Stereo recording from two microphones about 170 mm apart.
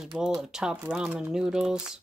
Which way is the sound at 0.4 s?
5° right (ahead or behind).